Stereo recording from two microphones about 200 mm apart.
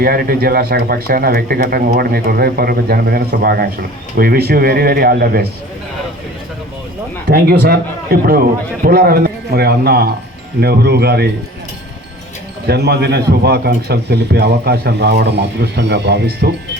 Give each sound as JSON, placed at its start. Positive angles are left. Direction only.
{"t": 0.0, "sound": "speech", "side_deg": -50}
{"t": 7.3, "sound": "speech", "side_deg": -50}
{"t": 12.6, "sound": "a man's voice", "side_deg": -55}